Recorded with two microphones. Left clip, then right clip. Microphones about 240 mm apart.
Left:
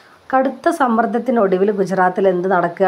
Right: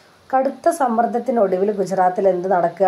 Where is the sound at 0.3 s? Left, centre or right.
Left.